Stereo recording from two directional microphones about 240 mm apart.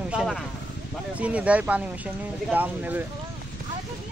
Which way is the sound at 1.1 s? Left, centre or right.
Centre.